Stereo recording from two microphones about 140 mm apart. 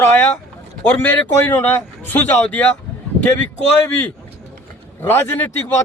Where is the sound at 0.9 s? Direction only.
10° left (ahead or behind).